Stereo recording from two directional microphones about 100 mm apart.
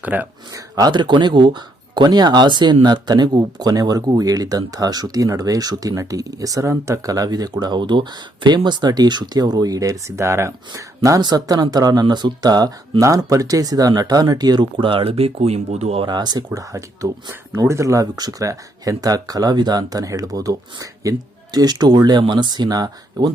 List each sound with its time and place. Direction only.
0.0 s speech: 15° right (ahead or behind)
0.9 s speech: 50° right (ahead or behind); by 16.0 s 90° right
16.0 s speech: 45° right (ahead or behind)
16.6 s speech: 35° right (ahead or behind)